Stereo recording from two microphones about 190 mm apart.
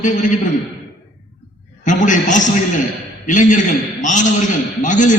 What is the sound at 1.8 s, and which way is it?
A man's voice, 40° left (ahead or behind).